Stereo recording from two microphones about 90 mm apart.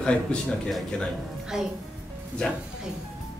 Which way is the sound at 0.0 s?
5° left (ahead or behind).